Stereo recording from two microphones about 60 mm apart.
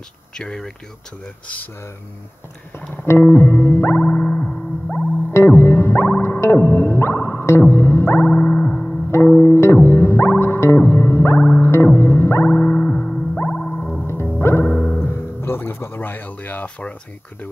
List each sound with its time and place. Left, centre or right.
0.4 s speech: centre
3.1 s music: left
3.9 s music: left
5.3 s music: left
8.3 s music: left
9.4 s music: left
12.5 s music: left
13.3 s music: left